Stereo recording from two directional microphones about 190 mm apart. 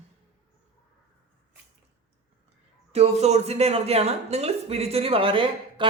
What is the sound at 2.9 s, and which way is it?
Speech, 35° right (ahead or behind).